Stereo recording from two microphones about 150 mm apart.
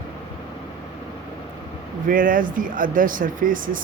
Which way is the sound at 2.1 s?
65° right (ahead or behind).